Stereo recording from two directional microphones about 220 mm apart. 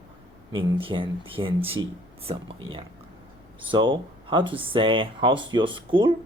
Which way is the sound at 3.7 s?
20° right (ahead or behind).